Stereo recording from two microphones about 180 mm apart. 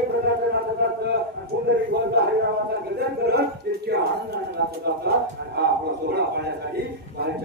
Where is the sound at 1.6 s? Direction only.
65° right (ahead or behind).